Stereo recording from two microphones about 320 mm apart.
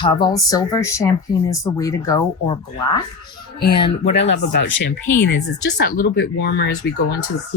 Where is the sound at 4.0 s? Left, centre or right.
Left.